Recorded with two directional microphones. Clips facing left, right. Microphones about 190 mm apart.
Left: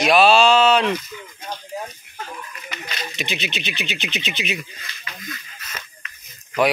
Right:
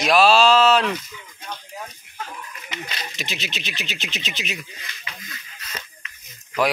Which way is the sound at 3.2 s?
Centre (ahead or behind).